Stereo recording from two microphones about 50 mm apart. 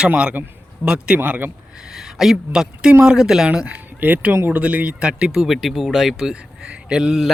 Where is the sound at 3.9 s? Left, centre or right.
Right.